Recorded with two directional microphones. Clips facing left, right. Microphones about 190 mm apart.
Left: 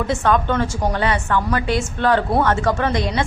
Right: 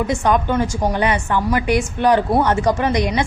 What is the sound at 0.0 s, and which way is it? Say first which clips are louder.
A woman's voice: right 1 dB; 15° right (ahead or behind).